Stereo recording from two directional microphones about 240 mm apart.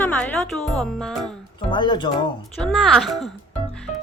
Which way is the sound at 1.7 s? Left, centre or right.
Centre.